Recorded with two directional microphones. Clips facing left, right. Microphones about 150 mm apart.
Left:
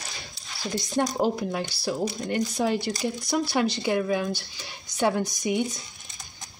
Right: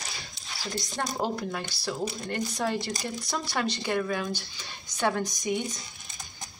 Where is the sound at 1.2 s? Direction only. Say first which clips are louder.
Left 5 dB; 15° left (ahead or behind).